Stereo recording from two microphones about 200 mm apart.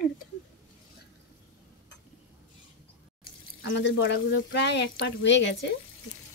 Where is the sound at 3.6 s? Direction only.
65° left (ahead or behind).